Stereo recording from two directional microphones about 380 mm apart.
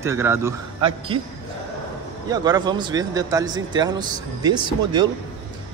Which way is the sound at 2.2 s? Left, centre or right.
Centre.